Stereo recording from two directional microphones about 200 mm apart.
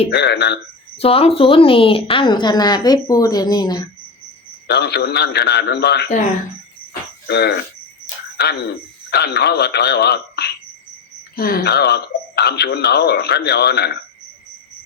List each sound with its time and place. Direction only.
0.1 s speech: 55° left (ahead or behind)
0.9 s a woman's voice: 30° left (ahead or behind)
4.7 s speech: 55° left (ahead or behind)
7.3 s speech: 55° left (ahead or behind)
9.0 s speech: 55° left (ahead or behind)